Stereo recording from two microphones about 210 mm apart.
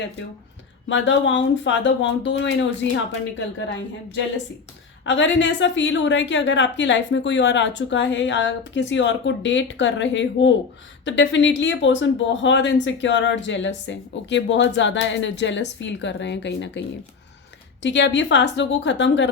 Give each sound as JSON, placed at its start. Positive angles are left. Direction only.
{"t": 0.9, "sound": "speech", "side_deg": 60}
{"t": 17.8, "sound": "speech", "side_deg": 60}